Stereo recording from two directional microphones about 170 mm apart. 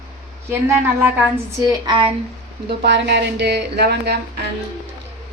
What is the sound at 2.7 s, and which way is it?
Speech, 85° right.